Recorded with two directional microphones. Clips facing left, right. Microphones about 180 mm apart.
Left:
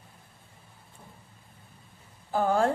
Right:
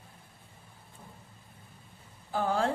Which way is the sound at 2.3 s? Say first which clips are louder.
Left 4 dB; 45° left (ahead or behind).